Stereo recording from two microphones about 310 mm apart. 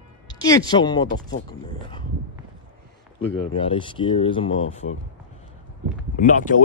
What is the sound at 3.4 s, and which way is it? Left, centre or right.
Speech, centre.